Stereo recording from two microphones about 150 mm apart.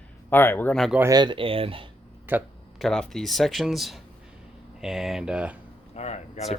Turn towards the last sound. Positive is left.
turn(degrees=45)  # may be behind; listen again after turning